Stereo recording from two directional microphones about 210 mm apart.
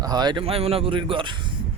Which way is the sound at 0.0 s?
20° right (ahead or behind).